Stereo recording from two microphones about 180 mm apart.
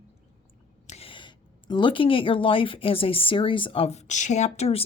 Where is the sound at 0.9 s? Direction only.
35° left (ahead or behind).